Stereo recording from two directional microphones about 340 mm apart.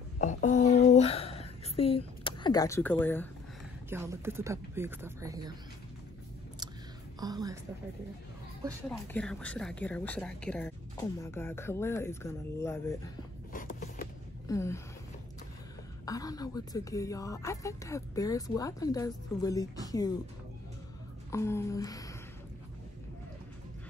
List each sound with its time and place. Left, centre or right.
0.2 s a sound: left
3.9 s speech: centre
7.2 s a woman's voice: centre
8.8 s a woman's voice: centre
13.5 s a sound: left
14.5 s speech: centre
16.1 s speech: centre
21.3 s speech: centre